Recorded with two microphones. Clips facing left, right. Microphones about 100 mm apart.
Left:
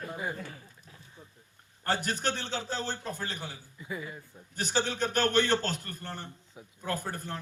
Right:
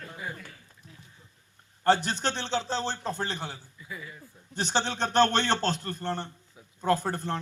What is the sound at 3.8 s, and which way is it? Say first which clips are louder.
Speech: left 5 dB; 25° left (ahead or behind).